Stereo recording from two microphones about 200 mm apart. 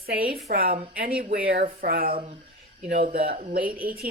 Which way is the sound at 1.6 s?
30° right (ahead or behind).